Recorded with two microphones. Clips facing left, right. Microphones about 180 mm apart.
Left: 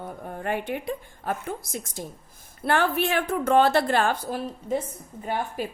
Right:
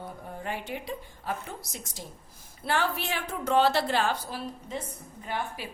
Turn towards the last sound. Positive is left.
turn(degrees=45)  # may be behind; listen again after turning